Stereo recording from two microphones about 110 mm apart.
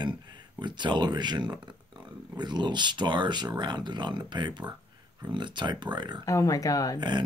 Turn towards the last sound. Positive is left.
turn(degrees=35)  # may be behind; listen again after turning